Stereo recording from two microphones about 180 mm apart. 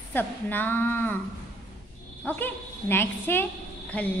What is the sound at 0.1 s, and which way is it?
A woman's voice, 10° left (ahead or behind).